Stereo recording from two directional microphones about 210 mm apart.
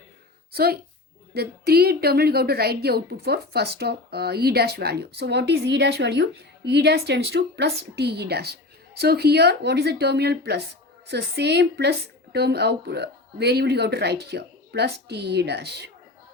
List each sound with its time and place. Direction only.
0.5 s a woman's voice: 45° right (ahead or behind)